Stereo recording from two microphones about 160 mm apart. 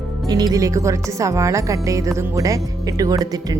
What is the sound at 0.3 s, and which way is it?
Speech, 25° right (ahead or behind).